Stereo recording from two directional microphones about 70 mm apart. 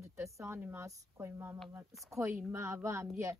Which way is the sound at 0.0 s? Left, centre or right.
Right.